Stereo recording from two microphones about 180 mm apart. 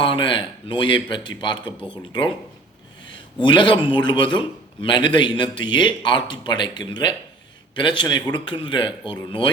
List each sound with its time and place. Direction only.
0.0 s a man's voice: 30° left (ahead or behind)
3.4 s a man's voice: 25° left (ahead or behind)